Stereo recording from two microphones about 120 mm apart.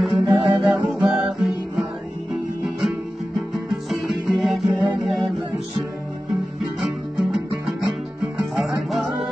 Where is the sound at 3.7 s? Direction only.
Centre (ahead or behind).